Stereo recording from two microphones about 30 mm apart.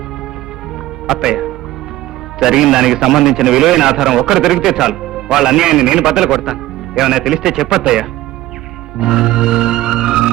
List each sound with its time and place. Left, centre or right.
1.1 s a man's voice: centre
6.4 s music: centre
7.3 s a man's voice: centre
9.0 s music: centre